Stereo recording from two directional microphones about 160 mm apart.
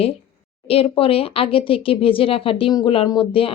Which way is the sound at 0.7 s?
35° left (ahead or behind).